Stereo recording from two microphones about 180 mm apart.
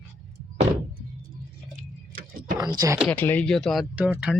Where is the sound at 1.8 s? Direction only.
50° right (ahead or behind).